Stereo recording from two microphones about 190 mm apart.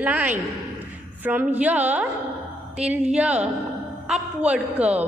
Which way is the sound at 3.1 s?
5° right (ahead or behind).